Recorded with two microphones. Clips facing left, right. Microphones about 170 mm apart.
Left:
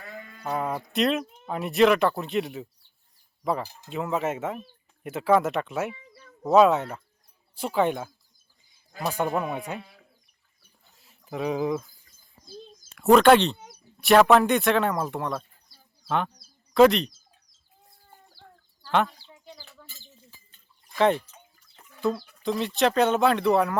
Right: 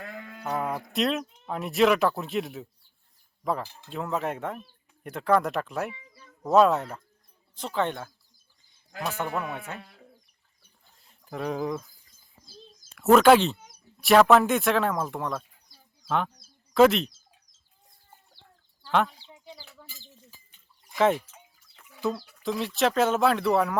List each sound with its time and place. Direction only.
0.2 s sheep: 65° right (ahead or behind)
0.4 s speech: centre (ahead or behind)
10.6 s a sound: 5° left (ahead or behind)
12.9 s speech: centre (ahead or behind)
18.9 s speech: centre (ahead or behind)
19.1 s bird: 15° right (ahead or behind)
21.0 s speech: 5° right (ahead or behind)